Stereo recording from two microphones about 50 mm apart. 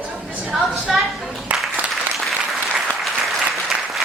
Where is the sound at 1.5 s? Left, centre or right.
Right.